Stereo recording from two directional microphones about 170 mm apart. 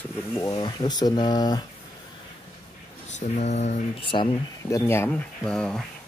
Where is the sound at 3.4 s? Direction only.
40° left (ahead or behind).